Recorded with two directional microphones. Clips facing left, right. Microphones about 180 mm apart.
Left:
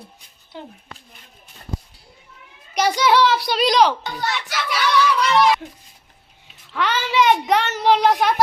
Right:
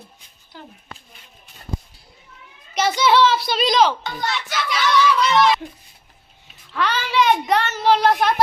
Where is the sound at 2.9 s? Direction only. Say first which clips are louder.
Right 1 dB; 10° left (ahead or behind).